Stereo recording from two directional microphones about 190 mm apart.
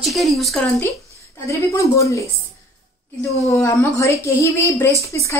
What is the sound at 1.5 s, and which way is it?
A woman's voice, 15° left (ahead or behind).